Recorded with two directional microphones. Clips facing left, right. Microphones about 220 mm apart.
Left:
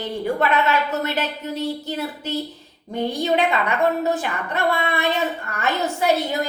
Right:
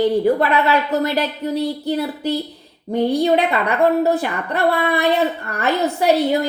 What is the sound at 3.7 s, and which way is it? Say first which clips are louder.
A woman's voice: right 5 dB; 35° right (ahead or behind).